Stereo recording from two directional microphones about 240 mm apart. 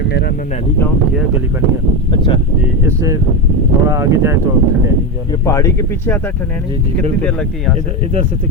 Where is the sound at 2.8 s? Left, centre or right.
Centre.